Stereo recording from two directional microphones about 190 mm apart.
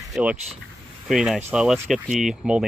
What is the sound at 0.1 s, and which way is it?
Speech, 5° right (ahead or behind).